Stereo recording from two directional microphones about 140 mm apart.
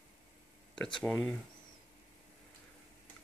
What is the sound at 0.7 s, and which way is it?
Speech, 5° left (ahead or behind).